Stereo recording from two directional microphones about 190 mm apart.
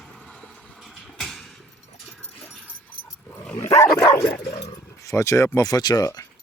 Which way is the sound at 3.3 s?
10° left (ahead or behind).